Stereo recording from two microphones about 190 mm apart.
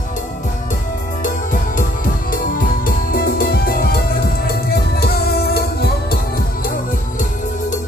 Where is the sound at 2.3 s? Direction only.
45° left (ahead or behind).